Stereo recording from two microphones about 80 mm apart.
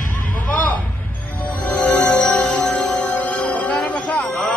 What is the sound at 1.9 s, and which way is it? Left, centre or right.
Music, centre.